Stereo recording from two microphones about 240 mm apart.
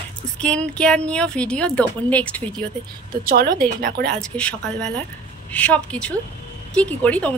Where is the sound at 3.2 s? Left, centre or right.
Right.